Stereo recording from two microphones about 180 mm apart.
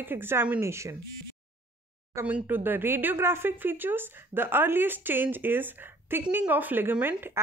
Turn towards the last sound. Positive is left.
turn(degrees=-10)  # may be behind; listen again after turning